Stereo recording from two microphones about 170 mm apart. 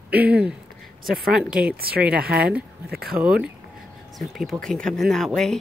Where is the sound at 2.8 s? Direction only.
65° right (ahead or behind).